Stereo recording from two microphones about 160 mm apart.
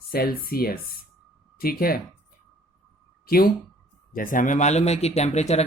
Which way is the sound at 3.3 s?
70° left (ahead or behind).